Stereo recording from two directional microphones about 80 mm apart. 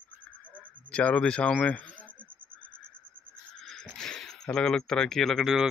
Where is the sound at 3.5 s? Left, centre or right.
Centre.